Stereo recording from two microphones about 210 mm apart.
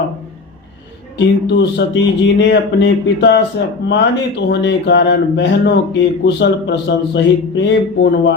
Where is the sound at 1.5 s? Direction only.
55° left (ahead or behind).